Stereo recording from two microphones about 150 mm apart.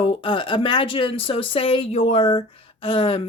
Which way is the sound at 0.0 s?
35° left (ahead or behind).